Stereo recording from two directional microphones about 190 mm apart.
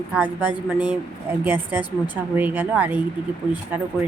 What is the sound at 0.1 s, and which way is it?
Speech, 10° right (ahead or behind).